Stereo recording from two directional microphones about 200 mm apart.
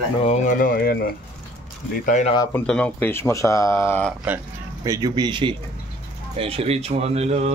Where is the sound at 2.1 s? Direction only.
35° left (ahead or behind).